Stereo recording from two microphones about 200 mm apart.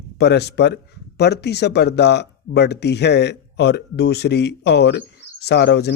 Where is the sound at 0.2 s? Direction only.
55° left (ahead or behind).